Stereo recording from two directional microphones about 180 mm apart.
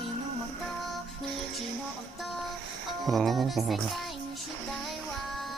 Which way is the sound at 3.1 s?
Centre (ahead or behind).